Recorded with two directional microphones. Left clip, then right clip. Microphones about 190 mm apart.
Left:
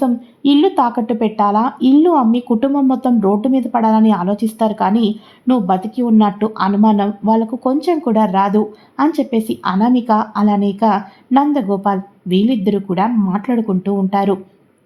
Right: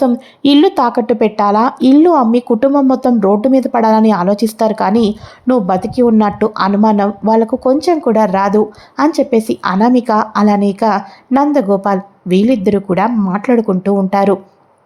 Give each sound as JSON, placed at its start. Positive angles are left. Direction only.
{"t": 0.0, "sound": "a woman's voice", "side_deg": -25}